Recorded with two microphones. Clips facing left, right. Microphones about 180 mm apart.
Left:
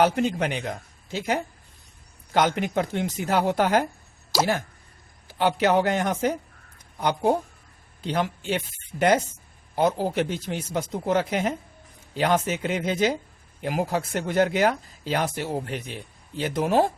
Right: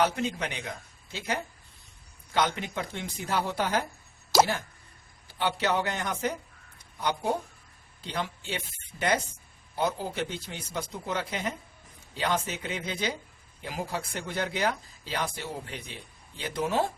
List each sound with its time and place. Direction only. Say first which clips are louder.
0.0 s a man's voice: left 6 dB; 55° left (ahead or behind)
5.4 s a man's voice: left 7 dB; 50° left (ahead or behind)